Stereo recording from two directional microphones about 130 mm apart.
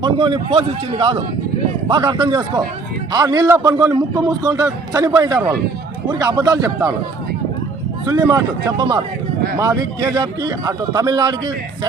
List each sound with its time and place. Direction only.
0.0 s a man's voice: 40° right (ahead or behind)
1.9 s a man's voice: 30° right (ahead or behind)
8.0 s a man's voice: 30° right (ahead or behind)